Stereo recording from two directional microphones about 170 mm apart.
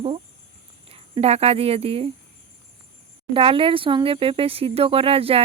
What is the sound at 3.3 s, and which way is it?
Speech, 30° right (ahead or behind).